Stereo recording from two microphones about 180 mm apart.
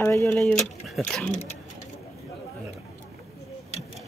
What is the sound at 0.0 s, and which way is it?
Speech, 15° left (ahead or behind).